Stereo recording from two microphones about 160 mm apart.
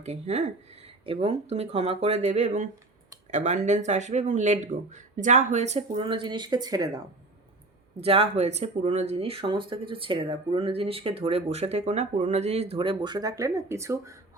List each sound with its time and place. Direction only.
0.0 s speech: 45° right (ahead or behind); by 7.0 s 25° right (ahead or behind)
8.0 s speech: 35° right (ahead or behind); by 14.2 s 20° right (ahead or behind)